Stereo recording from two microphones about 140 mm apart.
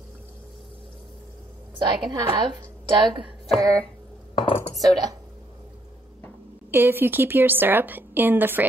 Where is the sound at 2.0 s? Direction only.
30° right (ahead or behind).